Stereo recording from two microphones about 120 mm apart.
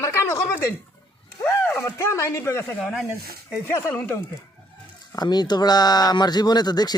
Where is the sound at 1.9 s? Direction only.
25° left (ahead or behind).